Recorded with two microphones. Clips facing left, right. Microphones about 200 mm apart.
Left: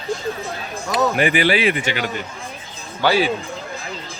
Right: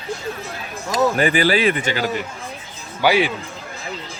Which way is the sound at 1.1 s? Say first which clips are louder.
Even; 40° right (ahead or behind).